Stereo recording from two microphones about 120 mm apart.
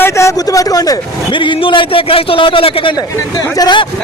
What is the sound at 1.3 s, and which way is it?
A man's voice, 45° left (ahead or behind).